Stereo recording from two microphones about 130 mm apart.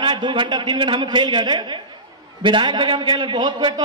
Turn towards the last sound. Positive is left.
turn(degrees=-40)  # may be behind; listen again after turning